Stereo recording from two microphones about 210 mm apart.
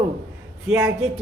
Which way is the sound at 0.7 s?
5° right (ahead or behind).